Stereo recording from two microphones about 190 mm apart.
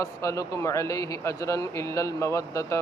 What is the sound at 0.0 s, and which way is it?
Speech, 15° left (ahead or behind).